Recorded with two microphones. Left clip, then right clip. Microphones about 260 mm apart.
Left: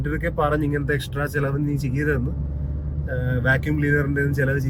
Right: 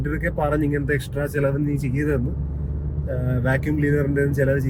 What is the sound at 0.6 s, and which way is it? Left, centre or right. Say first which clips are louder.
Speech: right 1 dB; left.